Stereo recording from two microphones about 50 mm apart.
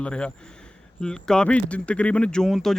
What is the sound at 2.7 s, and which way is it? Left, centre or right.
Speech, centre.